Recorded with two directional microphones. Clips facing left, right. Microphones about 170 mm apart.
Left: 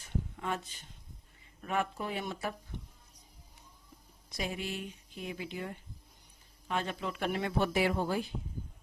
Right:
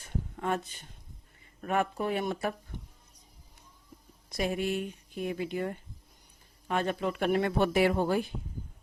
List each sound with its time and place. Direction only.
0.0 s a sound: 50° right (ahead or behind)
1.6 s speech: 50° right (ahead or behind)
4.3 s speech: 55° right (ahead or behind)